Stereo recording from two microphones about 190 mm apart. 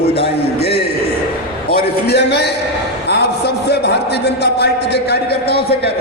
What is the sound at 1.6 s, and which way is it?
A man's voice, 55° left (ahead or behind).